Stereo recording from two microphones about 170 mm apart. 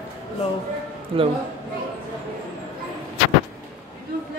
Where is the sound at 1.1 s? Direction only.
30° right (ahead or behind).